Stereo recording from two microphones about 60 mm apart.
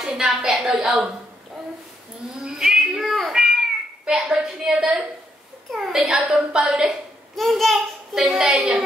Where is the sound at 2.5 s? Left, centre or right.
Centre.